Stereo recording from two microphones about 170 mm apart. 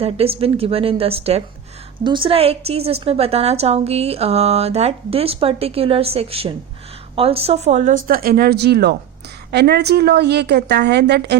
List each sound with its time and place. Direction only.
0.0 s a woman's voice: 35° right (ahead or behind); by 11.3 s 80° right